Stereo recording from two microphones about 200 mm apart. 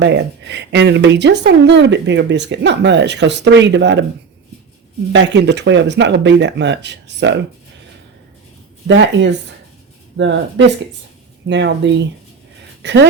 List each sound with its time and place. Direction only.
0.0 s speech: 60° right (ahead or behind)
5.1 s speech: 60° right (ahead or behind)
8.9 s speech: 65° right (ahead or behind)